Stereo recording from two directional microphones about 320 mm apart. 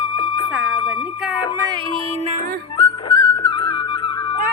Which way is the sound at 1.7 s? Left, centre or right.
Centre.